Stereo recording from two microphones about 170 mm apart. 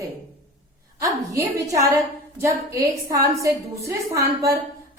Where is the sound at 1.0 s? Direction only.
20° right (ahead or behind).